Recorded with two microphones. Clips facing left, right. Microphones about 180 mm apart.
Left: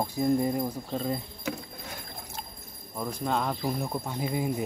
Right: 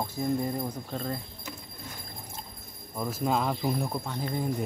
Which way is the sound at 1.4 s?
70° left (ahead or behind).